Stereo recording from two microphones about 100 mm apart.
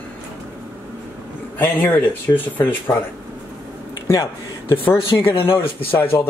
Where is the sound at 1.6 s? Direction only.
20° left (ahead or behind).